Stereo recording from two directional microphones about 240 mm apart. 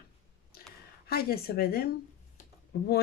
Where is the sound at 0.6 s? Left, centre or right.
Left.